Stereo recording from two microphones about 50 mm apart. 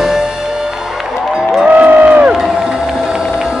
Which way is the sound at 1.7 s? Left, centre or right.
Right.